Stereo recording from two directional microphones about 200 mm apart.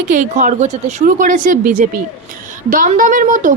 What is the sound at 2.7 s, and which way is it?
Speech, 40° right (ahead or behind).